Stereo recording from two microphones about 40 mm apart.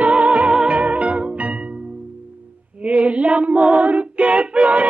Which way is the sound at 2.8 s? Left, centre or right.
Right.